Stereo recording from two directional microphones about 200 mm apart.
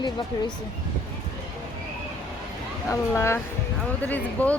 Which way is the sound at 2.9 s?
15° left (ahead or behind).